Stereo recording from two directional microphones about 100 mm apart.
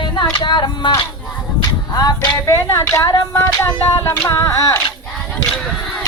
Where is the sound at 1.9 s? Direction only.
40° left (ahead or behind).